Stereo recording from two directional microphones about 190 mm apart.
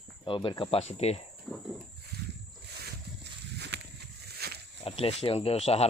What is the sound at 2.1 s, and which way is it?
Wild animals, 55° right (ahead or behind).